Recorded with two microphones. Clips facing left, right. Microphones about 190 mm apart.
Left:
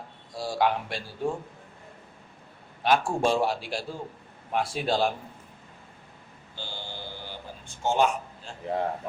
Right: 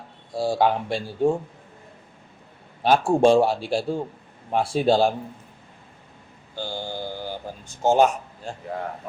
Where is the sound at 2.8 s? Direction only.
30° right (ahead or behind).